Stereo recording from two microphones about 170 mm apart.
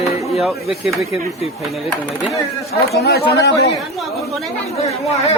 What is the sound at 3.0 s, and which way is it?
Speech, 70° left (ahead or behind).